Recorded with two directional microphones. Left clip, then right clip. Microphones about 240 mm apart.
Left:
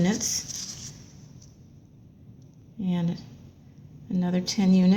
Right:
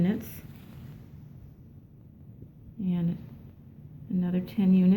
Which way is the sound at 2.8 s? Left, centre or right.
Centre.